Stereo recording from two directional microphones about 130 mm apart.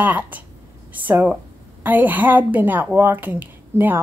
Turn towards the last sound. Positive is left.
turn(degrees=-15)  # may be behind; listen again after turning